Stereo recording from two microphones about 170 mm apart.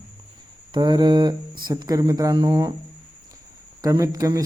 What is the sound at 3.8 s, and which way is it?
Speech, 20° right (ahead or behind).